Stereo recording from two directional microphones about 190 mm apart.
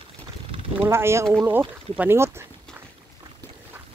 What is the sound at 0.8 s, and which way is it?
Speech, 15° right (ahead or behind).